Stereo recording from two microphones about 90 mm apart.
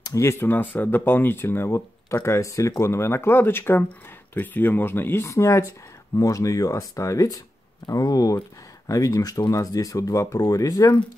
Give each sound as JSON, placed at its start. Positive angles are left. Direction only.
{"t": 0.0, "sound": "speech", "side_deg": 35}